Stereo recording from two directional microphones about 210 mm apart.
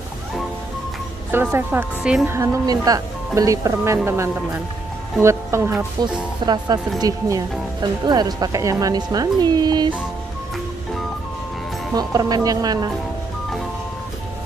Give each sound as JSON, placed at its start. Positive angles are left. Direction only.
{"t": 1.3, "sound": "a woman's voice", "side_deg": -10}
{"t": 11.9, "sound": "a woman's voice", "side_deg": -20}